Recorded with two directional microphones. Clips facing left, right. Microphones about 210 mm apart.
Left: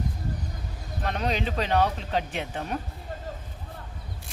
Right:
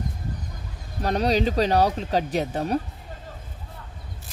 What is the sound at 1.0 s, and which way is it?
Speech, 35° right (ahead or behind).